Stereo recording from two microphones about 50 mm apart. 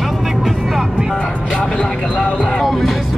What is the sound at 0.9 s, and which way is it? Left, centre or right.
Music, centre.